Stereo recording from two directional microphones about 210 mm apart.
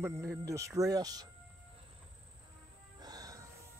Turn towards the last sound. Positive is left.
turn(degrees=-15)  # may be behind; listen again after turning